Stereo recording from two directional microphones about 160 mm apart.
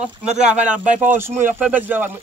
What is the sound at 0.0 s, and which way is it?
Speech, 5° right (ahead or behind).